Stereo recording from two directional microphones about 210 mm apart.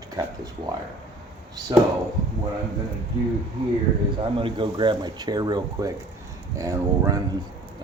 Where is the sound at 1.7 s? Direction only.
20° right (ahead or behind).